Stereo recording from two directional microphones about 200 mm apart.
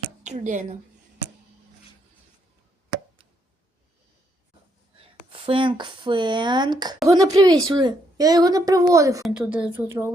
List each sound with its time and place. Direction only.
0.2 s a woman's voice: 35° right (ahead or behind)
5.3 s a woman's voice: 25° right (ahead or behind)
9.2 s a woman's voice: 5° right (ahead or behind)